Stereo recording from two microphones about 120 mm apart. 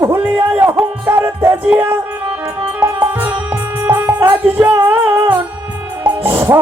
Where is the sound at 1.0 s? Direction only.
20° right (ahead or behind).